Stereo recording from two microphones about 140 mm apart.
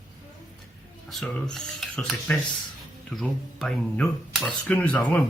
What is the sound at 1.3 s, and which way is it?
Speech, 5° left (ahead or behind).